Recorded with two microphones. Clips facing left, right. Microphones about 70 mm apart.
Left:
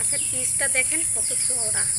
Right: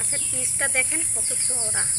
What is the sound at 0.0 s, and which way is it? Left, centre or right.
Snake, centre.